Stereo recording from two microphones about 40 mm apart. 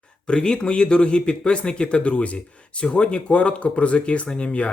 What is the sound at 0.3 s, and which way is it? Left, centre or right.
Speech, left.